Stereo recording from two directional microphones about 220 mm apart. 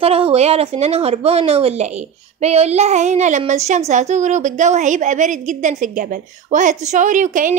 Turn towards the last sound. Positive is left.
turn(degrees=-35)  # may be behind; listen again after turning